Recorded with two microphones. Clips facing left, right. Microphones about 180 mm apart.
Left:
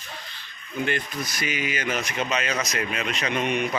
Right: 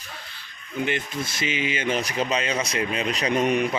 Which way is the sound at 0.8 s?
25° right (ahead or behind).